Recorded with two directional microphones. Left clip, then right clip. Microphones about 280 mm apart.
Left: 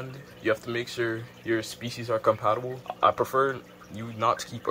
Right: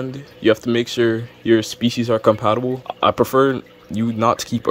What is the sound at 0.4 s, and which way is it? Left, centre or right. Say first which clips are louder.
Speech: right 11 dB; right.